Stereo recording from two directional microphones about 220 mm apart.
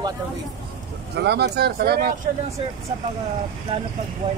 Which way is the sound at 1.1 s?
50° right (ahead or behind).